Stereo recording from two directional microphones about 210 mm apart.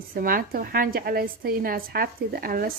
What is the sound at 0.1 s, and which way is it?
A woman's voice, 45° right (ahead or behind).